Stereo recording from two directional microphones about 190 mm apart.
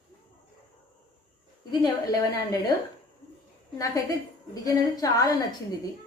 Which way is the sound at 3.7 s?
20° left (ahead or behind).